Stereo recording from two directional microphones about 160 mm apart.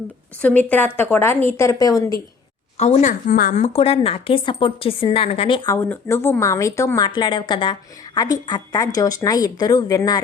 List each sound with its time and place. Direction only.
0.4 s speech: 10° left (ahead or behind)
2.7 s a woman's voice: 45° left (ahead or behind); by 3.6 s 60° left (ahead or behind)
3.6 s a woman's voice: 40° left (ahead or behind)
5.6 s a woman's voice: 15° left (ahead or behind)